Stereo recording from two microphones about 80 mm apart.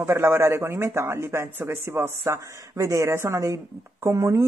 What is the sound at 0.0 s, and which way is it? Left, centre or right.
Speech, right.